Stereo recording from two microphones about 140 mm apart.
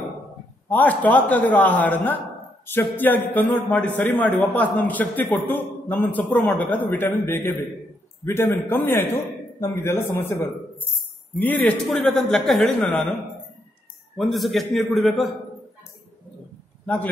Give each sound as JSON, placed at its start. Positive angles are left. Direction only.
{"t": 0.7, "sound": "a man's voice", "side_deg": 10}
{"t": 14.1, "sound": "a man's voice", "side_deg": 0}
{"t": 16.8, "sound": "a man's voice", "side_deg": 10}